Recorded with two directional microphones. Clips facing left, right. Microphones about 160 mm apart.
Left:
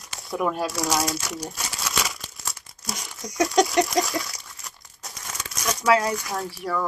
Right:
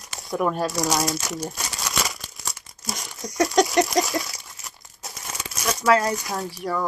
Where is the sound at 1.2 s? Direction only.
5° right (ahead or behind).